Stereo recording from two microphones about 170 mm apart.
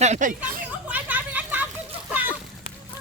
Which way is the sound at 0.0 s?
45° right (ahead or behind).